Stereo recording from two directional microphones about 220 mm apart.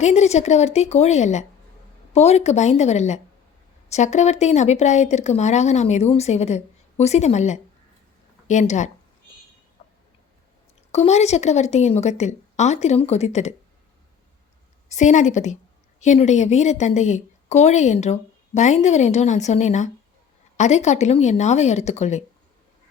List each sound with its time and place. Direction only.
0.0 s a woman's voice: 30° left (ahead or behind)
10.9 s a woman's voice: 30° left (ahead or behind)
14.8 s a woman's voice: 35° left (ahead or behind)